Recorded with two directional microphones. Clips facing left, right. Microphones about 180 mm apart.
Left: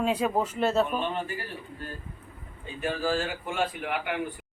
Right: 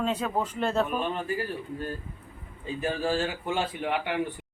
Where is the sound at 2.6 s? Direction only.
35° right (ahead or behind).